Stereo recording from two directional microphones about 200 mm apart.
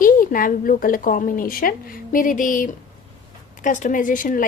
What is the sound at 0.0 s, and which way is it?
A woman's voice, 45° left (ahead or behind).